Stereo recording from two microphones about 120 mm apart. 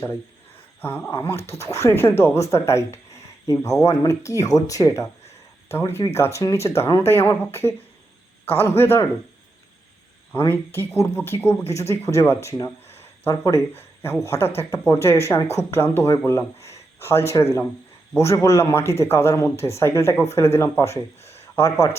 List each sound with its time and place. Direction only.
0.8 s speech: 15° left (ahead or behind)
10.5 s speech: 20° left (ahead or behind)
11.6 s speech: 65° left (ahead or behind)
11.9 s speech: 20° left (ahead or behind)